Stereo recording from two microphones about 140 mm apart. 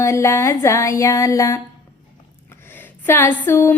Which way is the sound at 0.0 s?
20° left (ahead or behind).